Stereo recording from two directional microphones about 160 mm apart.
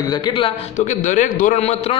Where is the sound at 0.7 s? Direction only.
50° left (ahead or behind).